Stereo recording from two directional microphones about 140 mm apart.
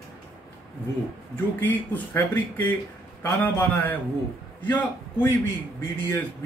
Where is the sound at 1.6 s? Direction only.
10° left (ahead or behind).